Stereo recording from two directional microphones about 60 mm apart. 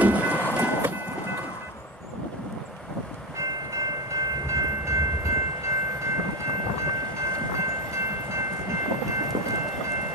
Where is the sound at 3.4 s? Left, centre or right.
Right.